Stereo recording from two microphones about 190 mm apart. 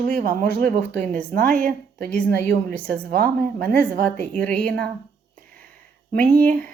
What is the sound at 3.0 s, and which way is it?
Speech, 50° right (ahead or behind).